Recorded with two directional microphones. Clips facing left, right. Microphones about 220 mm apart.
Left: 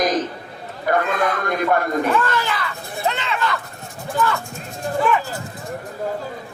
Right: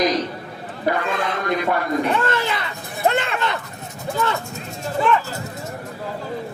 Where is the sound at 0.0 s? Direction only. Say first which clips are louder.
Even; 50° left (ahead or behind).